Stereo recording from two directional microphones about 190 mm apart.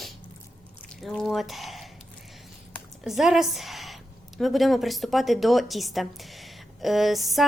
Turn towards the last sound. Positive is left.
turn(degrees=0)  # may be behind; listen again after turning